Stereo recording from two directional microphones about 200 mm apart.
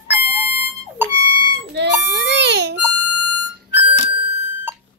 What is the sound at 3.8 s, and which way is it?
Music, 25° right (ahead or behind).